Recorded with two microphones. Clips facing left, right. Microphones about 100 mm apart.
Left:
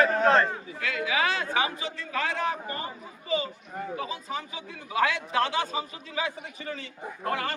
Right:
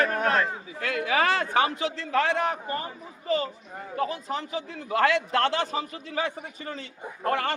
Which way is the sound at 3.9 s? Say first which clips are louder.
Right 7 dB; 60° right (ahead or behind).